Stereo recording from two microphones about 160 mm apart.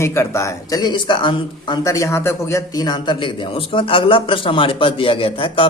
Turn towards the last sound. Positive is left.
turn(degrees=35)  # may be behind; listen again after turning